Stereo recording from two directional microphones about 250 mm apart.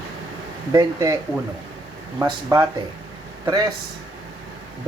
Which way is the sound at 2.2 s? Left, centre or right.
Centre.